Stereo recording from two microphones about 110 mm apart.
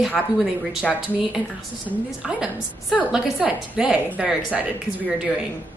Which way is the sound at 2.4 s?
5° right (ahead or behind).